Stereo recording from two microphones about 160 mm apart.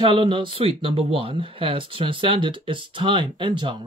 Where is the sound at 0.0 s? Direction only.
30° right (ahead or behind).